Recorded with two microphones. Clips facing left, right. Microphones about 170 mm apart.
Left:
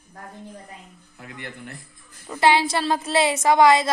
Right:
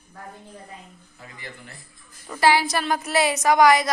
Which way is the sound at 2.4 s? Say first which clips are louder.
Left 1 dB; 25° left (ahead or behind).